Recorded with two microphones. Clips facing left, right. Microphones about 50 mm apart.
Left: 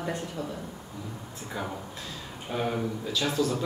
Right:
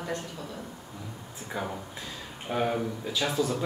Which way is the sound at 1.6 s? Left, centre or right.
Centre.